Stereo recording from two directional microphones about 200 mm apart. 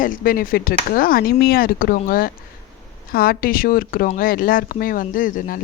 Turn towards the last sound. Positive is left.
turn(degrees=45)  # may be behind; listen again after turning